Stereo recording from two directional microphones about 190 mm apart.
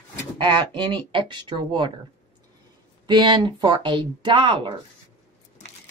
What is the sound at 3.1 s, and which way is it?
Speech, 25° right (ahead or behind).